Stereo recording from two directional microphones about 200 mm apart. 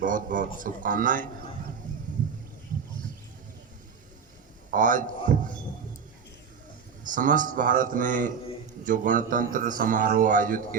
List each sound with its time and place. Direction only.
0.0 s a man's voice: 40° right (ahead or behind)
4.7 s a man's voice: 40° right (ahead or behind)
7.0 s a man's voice: 40° right (ahead or behind)